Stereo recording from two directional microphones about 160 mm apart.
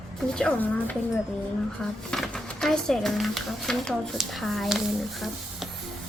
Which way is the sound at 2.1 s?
5° left (ahead or behind).